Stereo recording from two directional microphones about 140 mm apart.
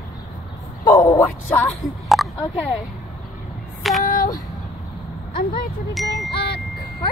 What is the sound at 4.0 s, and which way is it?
Child singing, 80° left.